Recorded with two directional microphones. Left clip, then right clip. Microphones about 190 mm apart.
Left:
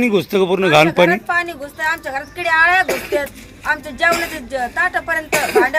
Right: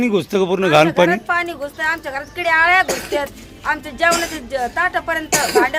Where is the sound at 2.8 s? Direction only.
65° right (ahead or behind).